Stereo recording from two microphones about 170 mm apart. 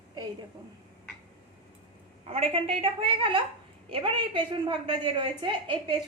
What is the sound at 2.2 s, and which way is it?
A woman's voice, 35° right (ahead or behind).